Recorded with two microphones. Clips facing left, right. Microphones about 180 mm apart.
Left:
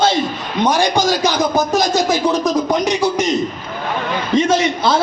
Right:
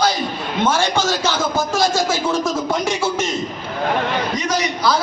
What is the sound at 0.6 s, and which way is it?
A man's voice, 15° left (ahead or behind).